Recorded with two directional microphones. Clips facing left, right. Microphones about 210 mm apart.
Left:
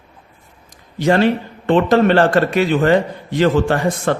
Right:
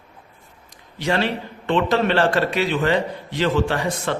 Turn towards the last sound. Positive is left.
turn(degrees=50)  # may be behind; listen again after turning